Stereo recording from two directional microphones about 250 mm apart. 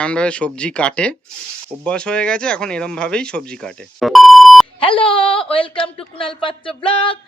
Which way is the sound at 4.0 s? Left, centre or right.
Centre.